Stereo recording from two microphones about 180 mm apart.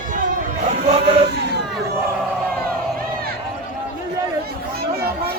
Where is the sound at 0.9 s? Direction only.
30° right (ahead or behind).